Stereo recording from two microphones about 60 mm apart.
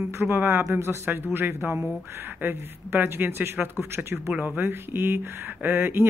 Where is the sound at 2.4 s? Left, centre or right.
Right.